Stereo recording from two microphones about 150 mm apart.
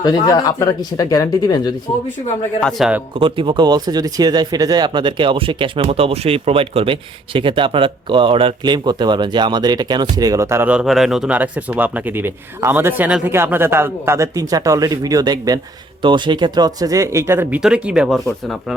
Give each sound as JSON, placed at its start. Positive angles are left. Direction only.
{"t": 0.0, "sound": "speech", "side_deg": 25}
{"t": 2.6, "sound": "speech", "side_deg": 0}
{"t": 3.2, "sound": "speech", "side_deg": -35}